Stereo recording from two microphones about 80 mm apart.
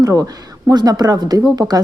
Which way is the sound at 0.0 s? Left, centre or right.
Right.